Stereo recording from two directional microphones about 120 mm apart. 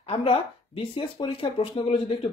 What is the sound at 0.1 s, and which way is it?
Speech, 50° left (ahead or behind).